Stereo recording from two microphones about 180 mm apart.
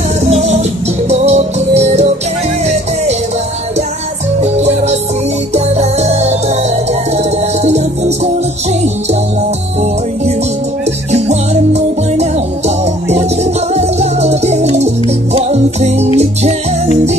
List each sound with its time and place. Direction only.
0.3 s music: 35° right (ahead or behind)
4.4 s music: 35° right (ahead or behind)
7.6 s music: 35° right (ahead or behind)
11.1 s music: 40° right (ahead or behind)